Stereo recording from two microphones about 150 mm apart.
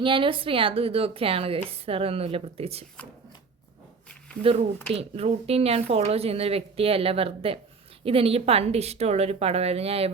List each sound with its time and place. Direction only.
0.0 s a woman's voice: 35° right (ahead or behind)
4.9 s a woman's voice: 40° right (ahead or behind)